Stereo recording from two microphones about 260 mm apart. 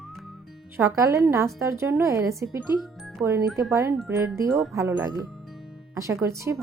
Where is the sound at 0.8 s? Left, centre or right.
Centre.